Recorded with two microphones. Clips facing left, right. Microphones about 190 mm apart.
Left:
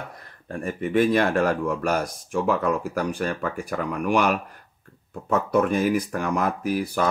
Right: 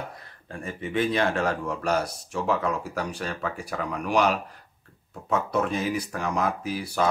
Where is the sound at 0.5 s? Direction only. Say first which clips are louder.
Left 6 dB; 55° left (ahead or behind).